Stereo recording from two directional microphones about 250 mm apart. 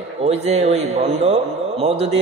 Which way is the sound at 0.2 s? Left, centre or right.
Right.